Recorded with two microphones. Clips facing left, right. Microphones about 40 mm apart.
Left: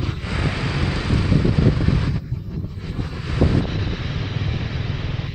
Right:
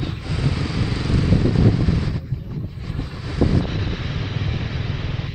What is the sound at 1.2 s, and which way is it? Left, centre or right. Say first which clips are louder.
Vehicle: right 1 dB; centre.